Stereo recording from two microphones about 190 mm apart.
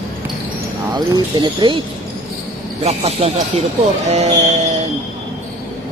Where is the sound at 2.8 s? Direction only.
35° right (ahead or behind).